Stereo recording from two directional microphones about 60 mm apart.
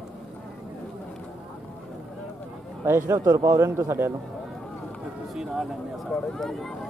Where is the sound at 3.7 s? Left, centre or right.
Right.